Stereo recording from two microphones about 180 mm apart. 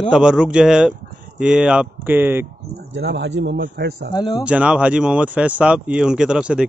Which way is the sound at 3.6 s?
60° right (ahead or behind).